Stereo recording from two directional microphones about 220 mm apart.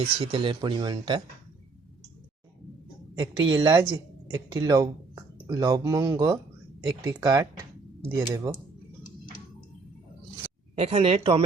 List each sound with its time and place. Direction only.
0.0 s speech: 25° right (ahead or behind)
3.2 s speech: 20° right (ahead or behind)
10.8 s speech: 25° right (ahead or behind)